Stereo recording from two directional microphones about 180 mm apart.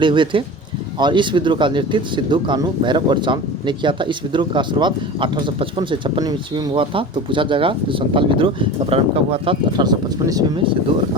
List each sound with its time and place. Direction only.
0.0 s speech: 25° right (ahead or behind)
6.7 s speech: 30° right (ahead or behind)